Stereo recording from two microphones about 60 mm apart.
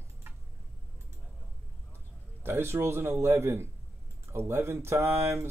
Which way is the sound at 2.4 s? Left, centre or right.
Right.